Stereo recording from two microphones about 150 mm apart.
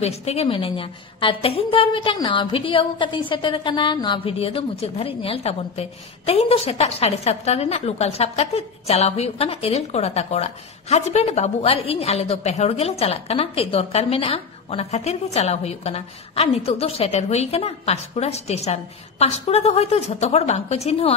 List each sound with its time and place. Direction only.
0.0 s a woman's voice: 45° left (ahead or behind)